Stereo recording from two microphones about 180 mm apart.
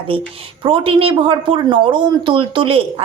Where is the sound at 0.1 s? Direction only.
30° right (ahead or behind).